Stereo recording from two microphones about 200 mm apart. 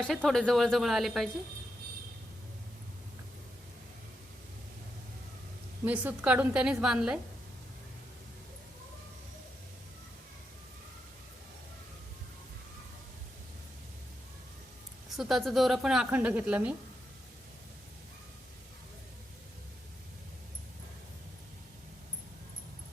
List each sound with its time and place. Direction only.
0.0 s a woman's voice: centre (ahead or behind)
5.8 s a woman's voice: 10° right (ahead or behind)
15.1 s a woman's voice: centre (ahead or behind)